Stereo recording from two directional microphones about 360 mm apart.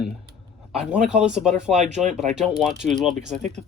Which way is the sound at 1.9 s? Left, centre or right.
Centre.